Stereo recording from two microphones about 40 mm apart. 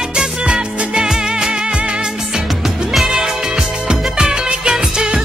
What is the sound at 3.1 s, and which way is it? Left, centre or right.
Music, centre.